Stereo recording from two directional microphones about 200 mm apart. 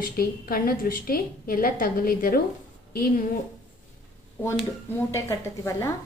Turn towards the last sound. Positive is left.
turn(degrees=15)  # may be behind; listen again after turning